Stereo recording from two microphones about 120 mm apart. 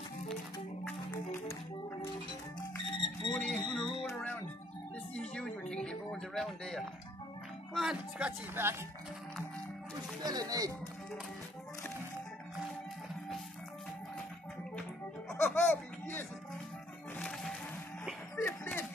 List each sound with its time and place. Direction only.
1.1 s music: 20° left (ahead or behind)
3.3 s music: 5° left (ahead or behind)
5.1 s a sound: 5° left (ahead or behind)
7.7 s speech: 5° right (ahead or behind)
8.6 s speech: 20° right (ahead or behind)
10.2 s speech: 30° right (ahead or behind)
15.4 s music: 15° left (ahead or behind)
18.3 s throat clearing: 20° left (ahead or behind)